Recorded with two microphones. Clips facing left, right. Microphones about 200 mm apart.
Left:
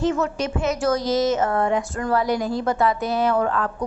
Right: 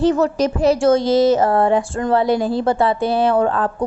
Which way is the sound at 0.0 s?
35° right (ahead or behind).